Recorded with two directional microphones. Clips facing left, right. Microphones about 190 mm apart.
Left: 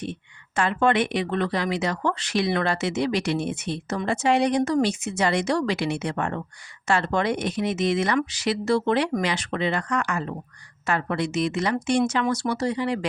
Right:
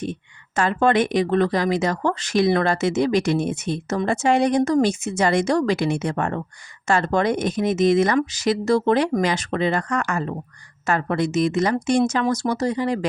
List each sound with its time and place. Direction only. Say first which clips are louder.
0.0 s speech: right 4 dB; 45° right (ahead or behind)